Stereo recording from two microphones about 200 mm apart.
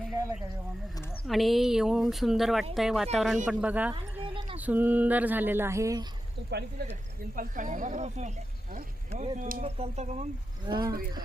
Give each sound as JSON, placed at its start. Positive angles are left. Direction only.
{"t": 1.3, "sound": "speech", "side_deg": 0}
{"t": 3.9, "sound": "a sound", "side_deg": -25}
{"t": 4.5, "sound": "speech", "side_deg": -10}
{"t": 6.5, "sound": "speech", "side_deg": -55}
{"t": 7.3, "sound": "speech", "side_deg": -40}
{"t": 10.7, "sound": "speech", "side_deg": -25}